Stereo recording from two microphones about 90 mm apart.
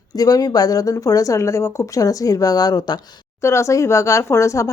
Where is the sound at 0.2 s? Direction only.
40° left (ahead or behind).